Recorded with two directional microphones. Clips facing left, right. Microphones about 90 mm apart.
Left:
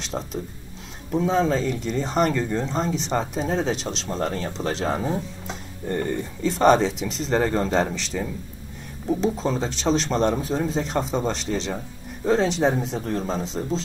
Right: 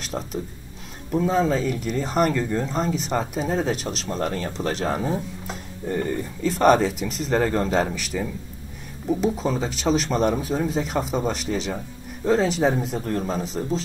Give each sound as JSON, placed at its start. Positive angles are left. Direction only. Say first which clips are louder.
{"t": 0.1, "sound": "speech", "louder": "right 1 dB", "side_deg": -5}
{"t": 4.6, "sound": "speech", "louder": "right 1 dB", "side_deg": 20}
{"t": 4.9, "sound": "speech", "louder": "even", "side_deg": -5}